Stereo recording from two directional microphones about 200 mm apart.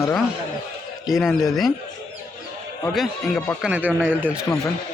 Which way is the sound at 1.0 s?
Centre (ahead or behind).